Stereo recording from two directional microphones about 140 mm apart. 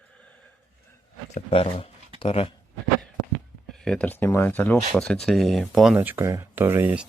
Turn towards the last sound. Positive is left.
turn(degrees=-15)  # may be behind; listen again after turning